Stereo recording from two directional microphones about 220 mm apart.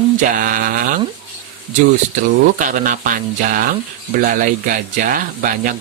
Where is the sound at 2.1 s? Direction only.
35° right (ahead or behind).